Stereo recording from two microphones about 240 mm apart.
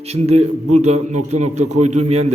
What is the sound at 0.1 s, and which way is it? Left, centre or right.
A man's voice, right.